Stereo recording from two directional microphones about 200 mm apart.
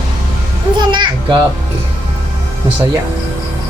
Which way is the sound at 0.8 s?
20° right (ahead or behind).